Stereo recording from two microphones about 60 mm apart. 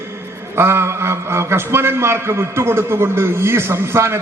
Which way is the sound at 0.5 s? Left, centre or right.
Right.